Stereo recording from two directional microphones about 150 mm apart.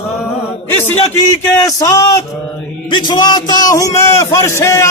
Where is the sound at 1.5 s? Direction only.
20° left (ahead or behind).